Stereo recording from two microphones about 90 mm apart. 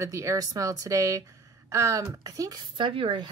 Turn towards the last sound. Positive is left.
turn(degrees=-65)  # may be behind; listen again after turning